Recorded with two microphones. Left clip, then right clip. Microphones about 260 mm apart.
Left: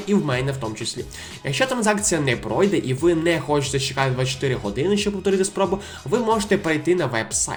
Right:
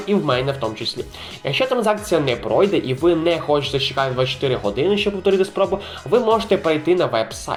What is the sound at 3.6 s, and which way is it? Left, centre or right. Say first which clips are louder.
Speech: right 4 dB; left.